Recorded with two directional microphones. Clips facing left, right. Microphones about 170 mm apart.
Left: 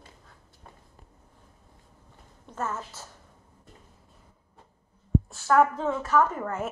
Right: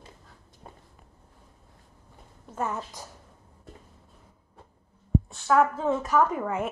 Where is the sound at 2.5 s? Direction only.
15° right (ahead or behind).